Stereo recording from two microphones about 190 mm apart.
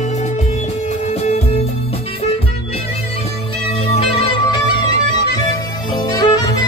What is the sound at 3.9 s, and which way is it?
Music, 30° left (ahead or behind).